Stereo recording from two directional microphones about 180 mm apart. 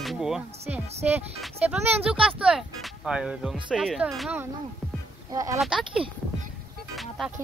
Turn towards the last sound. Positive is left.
turn(degrees=0)  # may be behind; listen again after turning